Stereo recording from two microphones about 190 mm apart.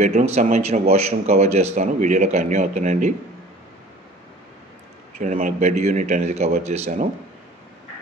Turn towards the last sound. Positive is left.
turn(degrees=-35)  # may be behind; listen again after turning